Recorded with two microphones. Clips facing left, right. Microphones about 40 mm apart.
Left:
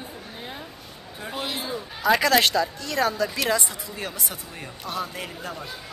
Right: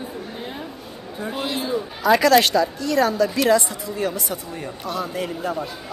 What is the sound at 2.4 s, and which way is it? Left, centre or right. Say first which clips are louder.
Speech: right 3 dB; right.